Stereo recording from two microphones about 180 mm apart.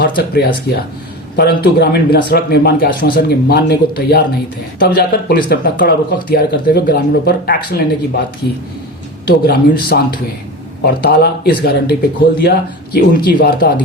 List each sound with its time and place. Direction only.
0.2 s speech: 60° left (ahead or behind)
9.2 s speech: 60° left (ahead or behind)